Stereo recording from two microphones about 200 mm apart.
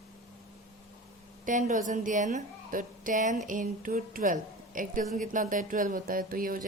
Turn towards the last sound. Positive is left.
turn(degrees=-45)  # may be behind; listen again after turning